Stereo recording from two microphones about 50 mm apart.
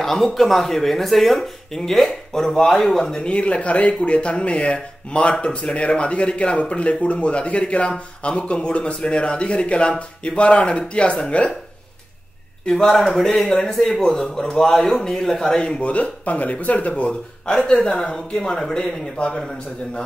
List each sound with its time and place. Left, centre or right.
0.0 s speech: centre
3.3 s speech: left
12.6 s a man's voice: centre; by 17.1 s left
17.1 s a man's voice: centre